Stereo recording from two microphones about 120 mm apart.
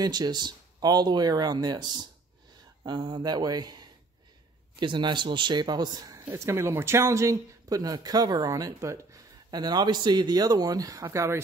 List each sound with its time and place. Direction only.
0.0 s speech: 35° right (ahead or behind)
6.2 s speech: 20° right (ahead or behind)